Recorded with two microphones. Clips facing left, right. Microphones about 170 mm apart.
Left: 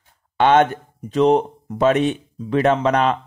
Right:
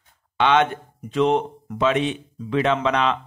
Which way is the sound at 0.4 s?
45° left (ahead or behind).